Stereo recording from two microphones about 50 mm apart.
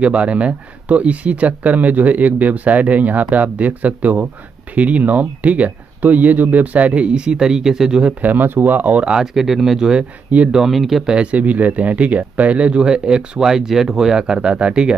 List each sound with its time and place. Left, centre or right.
0.0 s speech: right
8.2 s speech: right
9.0 s speech: centre
11.1 s speech: right